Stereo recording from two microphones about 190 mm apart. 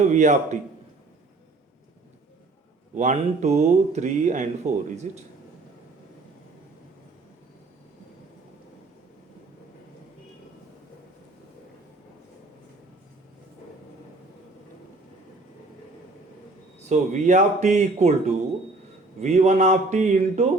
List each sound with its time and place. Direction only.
0.0 s speech: 40° right (ahead or behind)
2.9 s speech: 40° right (ahead or behind)
16.9 s speech: 40° right (ahead or behind)